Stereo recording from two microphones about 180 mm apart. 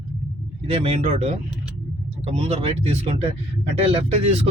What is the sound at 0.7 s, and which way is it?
Speech, 30° right (ahead or behind).